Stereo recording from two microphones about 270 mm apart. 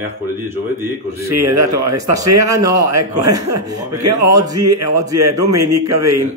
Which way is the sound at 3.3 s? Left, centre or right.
Right.